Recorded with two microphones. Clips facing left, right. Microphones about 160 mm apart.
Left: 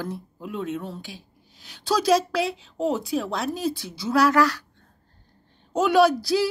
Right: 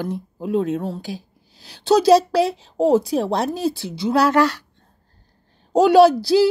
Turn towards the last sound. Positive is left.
turn(degrees=-30)  # may be behind; listen again after turning